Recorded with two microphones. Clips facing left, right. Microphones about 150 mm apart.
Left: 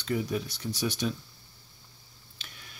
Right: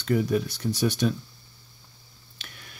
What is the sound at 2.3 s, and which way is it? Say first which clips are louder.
Tick: right 3 dB; 60° right (ahead or behind).